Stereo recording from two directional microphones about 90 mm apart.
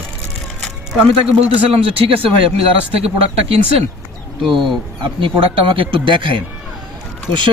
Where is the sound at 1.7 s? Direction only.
90° right.